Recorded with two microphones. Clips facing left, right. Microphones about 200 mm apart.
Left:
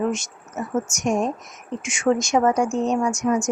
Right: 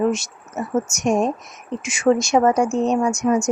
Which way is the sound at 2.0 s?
30° right (ahead or behind).